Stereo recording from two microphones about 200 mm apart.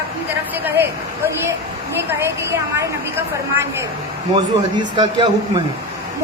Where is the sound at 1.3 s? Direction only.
15° right (ahead or behind).